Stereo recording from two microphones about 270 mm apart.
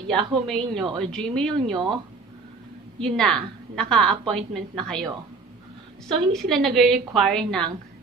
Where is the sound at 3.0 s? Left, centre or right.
Centre.